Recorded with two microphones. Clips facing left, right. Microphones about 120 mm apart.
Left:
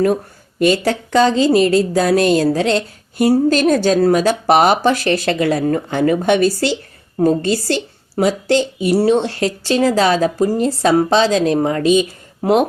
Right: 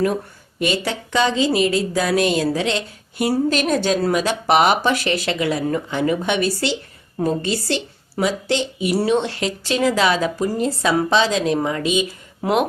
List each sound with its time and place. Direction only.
0.6 s a woman's voice: 40° left (ahead or behind)